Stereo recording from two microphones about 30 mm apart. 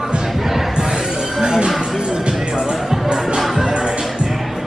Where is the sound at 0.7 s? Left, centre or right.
Right.